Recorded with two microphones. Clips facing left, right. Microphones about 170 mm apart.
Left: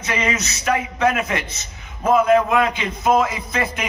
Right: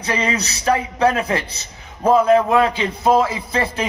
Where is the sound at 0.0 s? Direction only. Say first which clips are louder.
Right 2 dB; 35° right (ahead or behind).